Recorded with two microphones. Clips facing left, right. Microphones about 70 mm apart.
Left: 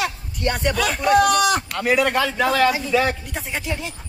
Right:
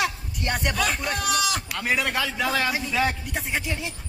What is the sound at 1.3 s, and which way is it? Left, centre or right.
Speech, left.